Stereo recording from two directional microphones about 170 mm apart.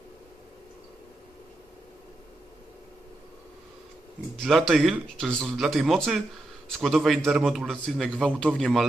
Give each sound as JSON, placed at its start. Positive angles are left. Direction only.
{"t": 4.4, "sound": "a man's voice", "side_deg": 0}